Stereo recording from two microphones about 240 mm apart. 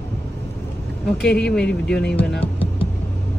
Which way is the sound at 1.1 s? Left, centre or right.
Centre.